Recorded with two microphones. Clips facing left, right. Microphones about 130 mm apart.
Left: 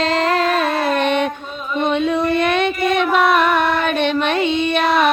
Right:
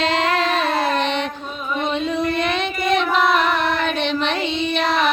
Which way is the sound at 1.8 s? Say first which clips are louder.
Left 5 dB; 60° left (ahead or behind).